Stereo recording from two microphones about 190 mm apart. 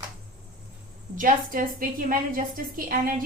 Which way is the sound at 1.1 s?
45° right (ahead or behind).